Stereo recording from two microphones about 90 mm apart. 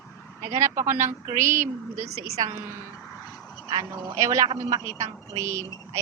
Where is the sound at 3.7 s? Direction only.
35° right (ahead or behind).